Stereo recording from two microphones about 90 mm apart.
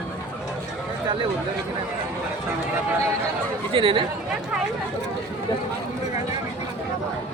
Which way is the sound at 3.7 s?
75° right (ahead or behind).